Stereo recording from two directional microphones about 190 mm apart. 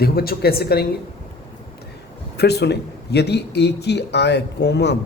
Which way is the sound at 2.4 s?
60° left (ahead or behind).